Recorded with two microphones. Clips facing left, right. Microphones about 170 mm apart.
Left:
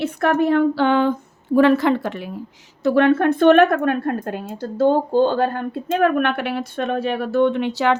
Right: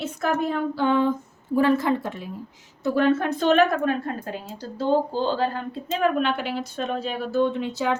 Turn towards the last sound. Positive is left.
turn(degrees=70)  # may be behind; listen again after turning